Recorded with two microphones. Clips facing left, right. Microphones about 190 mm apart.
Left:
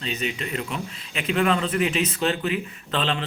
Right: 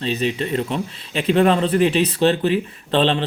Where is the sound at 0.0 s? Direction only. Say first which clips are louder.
Right 7 dB; 35° right (ahead or behind).